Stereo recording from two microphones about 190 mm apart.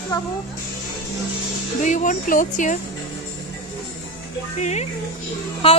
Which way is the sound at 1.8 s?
40° left (ahead or behind).